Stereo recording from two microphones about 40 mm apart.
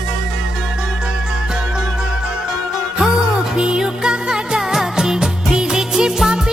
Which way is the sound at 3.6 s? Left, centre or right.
Centre.